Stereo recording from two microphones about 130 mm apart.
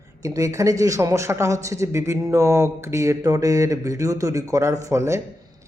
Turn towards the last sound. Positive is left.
turn(degrees=-20)  # may be behind; listen again after turning